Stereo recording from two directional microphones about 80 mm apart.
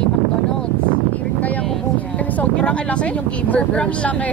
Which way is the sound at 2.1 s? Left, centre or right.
Centre.